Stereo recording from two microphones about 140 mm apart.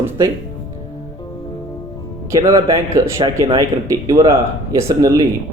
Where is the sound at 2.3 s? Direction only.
20° right (ahead or behind).